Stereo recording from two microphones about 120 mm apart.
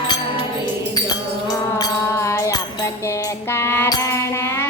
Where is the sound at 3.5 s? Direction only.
20° left (ahead or behind).